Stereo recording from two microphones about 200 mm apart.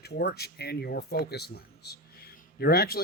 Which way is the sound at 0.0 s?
55° left (ahead or behind).